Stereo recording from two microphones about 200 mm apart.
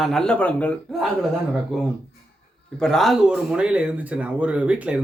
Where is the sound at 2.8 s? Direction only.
Centre (ahead or behind).